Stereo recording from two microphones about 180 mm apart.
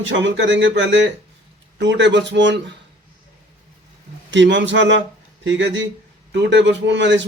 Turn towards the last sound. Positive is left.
turn(degrees=-80)